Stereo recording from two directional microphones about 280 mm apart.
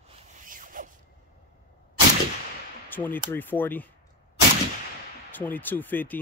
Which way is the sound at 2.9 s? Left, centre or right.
Centre.